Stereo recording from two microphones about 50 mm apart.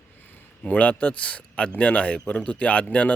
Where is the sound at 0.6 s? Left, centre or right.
Left.